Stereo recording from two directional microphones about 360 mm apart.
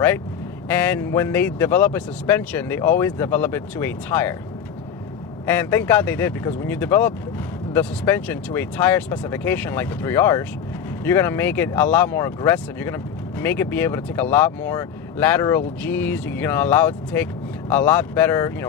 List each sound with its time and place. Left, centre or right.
0.7 s speech: centre
5.4 s speech: centre